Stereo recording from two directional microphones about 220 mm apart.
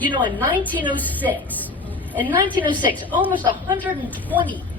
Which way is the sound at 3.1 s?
5° right (ahead or behind).